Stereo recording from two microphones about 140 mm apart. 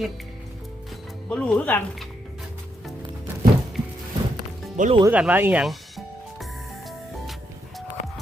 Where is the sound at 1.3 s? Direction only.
5° left (ahead or behind).